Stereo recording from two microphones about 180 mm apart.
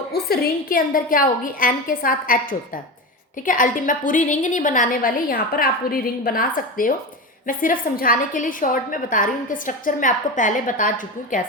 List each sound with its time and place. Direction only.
0.1 s a woman's voice: 55° left (ahead or behind)